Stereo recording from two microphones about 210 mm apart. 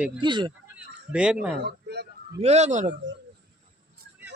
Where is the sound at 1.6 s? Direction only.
55° right (ahead or behind).